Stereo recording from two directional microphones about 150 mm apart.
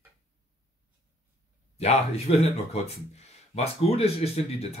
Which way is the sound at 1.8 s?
45° left (ahead or behind).